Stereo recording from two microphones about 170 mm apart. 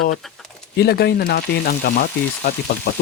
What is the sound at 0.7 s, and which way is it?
Speech, 70° left (ahead or behind).